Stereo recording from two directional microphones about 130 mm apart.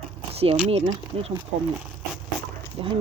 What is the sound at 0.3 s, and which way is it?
Speech, 50° right (ahead or behind).